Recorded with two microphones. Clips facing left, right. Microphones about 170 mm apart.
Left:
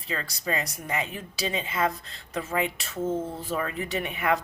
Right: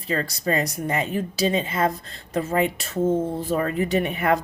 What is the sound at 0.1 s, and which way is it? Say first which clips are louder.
A woman's voice: right 7 dB; 40° right (ahead or behind).